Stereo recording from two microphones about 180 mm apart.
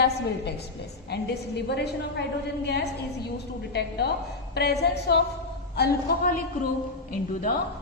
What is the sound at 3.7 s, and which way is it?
A woman's voice, 65° left (ahead or behind).